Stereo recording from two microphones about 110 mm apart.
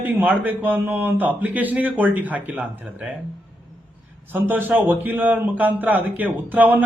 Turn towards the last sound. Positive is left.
turn(degrees=-15)  # may be behind; listen again after turning